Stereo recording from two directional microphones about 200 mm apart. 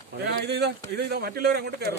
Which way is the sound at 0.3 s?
55° right (ahead or behind).